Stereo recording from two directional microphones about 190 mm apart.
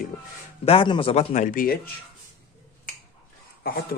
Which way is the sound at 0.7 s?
30° left (ahead or behind).